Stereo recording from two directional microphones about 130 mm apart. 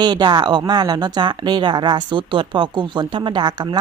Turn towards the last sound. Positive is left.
turn(degrees=-35)  # may be behind; listen again after turning